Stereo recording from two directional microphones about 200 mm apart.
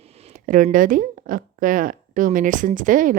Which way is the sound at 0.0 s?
30° right (ahead or behind).